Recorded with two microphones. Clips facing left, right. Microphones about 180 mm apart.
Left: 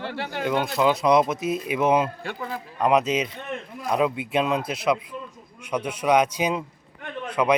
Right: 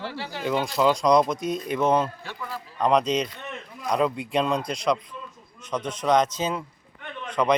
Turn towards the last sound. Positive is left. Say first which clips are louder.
# left 1 dB
turn(degrees=10)  # may be behind; listen again after turning